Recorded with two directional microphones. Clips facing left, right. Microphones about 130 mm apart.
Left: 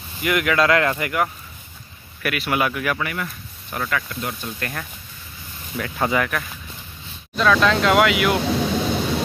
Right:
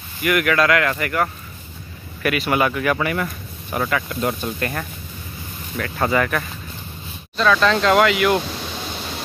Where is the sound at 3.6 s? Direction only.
15° right (ahead or behind).